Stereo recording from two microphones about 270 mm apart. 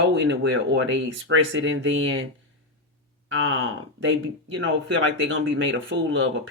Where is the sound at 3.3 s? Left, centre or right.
Right.